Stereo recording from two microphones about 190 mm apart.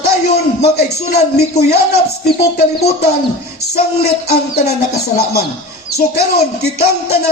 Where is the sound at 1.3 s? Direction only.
55° left (ahead or behind).